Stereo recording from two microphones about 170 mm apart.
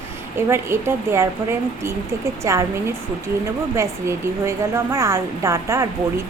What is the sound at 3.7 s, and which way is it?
A woman's voice, 15° right (ahead or behind).